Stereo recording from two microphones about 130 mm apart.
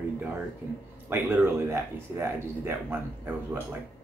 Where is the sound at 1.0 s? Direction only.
15° right (ahead or behind).